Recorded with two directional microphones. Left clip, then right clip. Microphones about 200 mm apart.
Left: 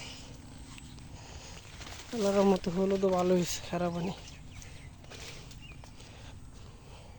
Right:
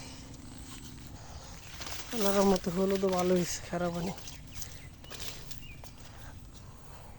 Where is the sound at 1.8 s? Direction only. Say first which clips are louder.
Right 5 dB; 40° right (ahead or behind).